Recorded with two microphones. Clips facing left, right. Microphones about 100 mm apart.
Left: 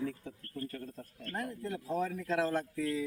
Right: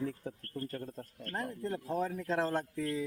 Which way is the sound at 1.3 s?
30° right (ahead or behind).